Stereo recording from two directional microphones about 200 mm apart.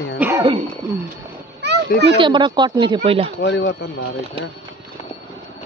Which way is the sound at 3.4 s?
60° left (ahead or behind).